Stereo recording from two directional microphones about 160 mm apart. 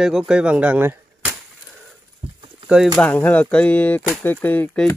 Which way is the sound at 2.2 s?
35° right (ahead or behind).